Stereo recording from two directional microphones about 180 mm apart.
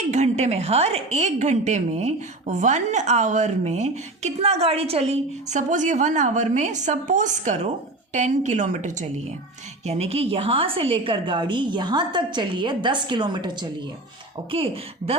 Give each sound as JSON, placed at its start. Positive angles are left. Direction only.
{"t": 0.1, "sound": "a woman's voice", "side_deg": -40}